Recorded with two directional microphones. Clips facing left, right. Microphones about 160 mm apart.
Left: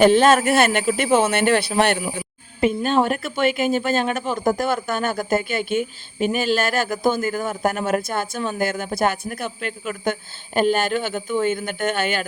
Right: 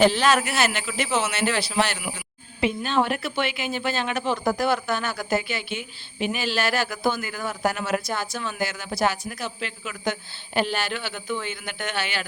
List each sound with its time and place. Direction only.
0.0 s a woman's voice: 50° left (ahead or behind)
2.1 s a woman's voice: 45° left (ahead or behind)